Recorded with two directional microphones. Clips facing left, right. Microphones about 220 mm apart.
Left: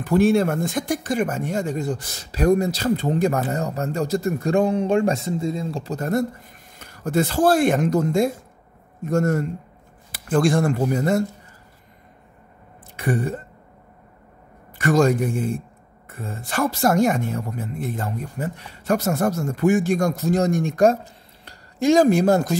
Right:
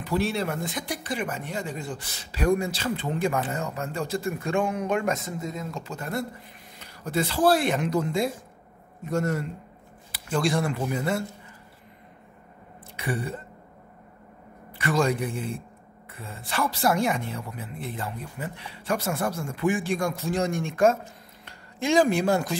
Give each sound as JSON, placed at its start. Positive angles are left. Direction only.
{"t": 0.0, "sound": "speech", "side_deg": 50}
{"t": 13.0, "sound": "speech", "side_deg": 45}
{"t": 14.8, "sound": "speech", "side_deg": 45}